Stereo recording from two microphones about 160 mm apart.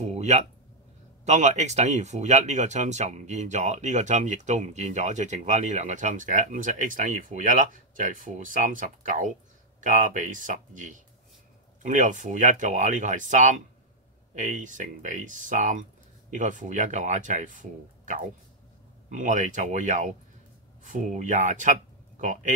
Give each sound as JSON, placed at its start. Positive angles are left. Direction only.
{"t": 0.0, "sound": "speech", "side_deg": -45}